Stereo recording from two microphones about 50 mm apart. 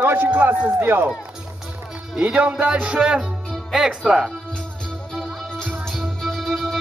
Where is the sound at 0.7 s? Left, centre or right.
Right.